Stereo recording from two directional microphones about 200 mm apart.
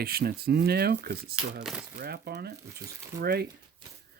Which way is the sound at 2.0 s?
50° right (ahead or behind).